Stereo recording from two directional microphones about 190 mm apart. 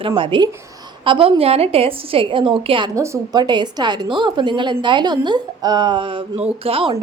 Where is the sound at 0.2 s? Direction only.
25° right (ahead or behind).